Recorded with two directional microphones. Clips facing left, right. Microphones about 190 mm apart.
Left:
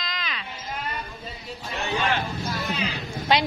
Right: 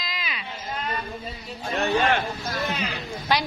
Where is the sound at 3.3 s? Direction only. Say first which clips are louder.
Left 2 dB; 20° left (ahead or behind).